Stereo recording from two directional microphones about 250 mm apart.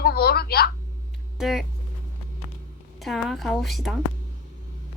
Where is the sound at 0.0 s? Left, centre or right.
Left.